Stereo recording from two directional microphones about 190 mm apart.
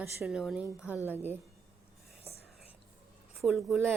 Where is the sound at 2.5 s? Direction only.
Centre (ahead or behind).